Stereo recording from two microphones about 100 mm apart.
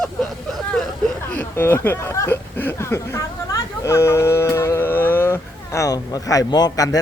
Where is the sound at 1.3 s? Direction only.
20° left (ahead or behind).